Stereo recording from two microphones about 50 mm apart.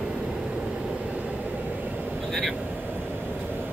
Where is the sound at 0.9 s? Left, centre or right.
Right.